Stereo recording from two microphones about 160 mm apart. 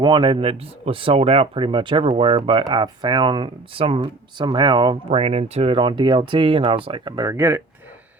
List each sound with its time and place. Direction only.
0.0 s speech: 30° right (ahead or behind)